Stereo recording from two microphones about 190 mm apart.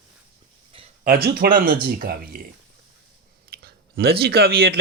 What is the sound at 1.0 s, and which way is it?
Speech, 50° right (ahead or behind).